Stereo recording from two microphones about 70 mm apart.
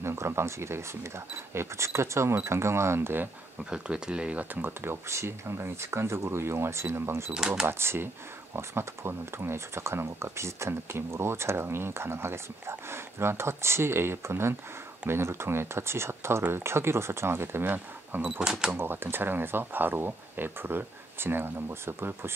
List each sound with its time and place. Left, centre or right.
0.0 s speech: right
3.7 s speech: centre
4.6 s speech: right
7.3 s speech: centre
7.6 s speech: right
18.4 s speech: centre
18.8 s speech: right